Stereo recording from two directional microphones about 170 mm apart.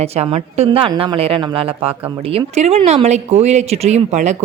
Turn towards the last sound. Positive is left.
turn(degrees=-45)  # may be behind; listen again after turning